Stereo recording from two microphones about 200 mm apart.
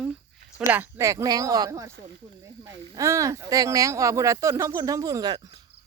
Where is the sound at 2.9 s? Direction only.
15° right (ahead or behind).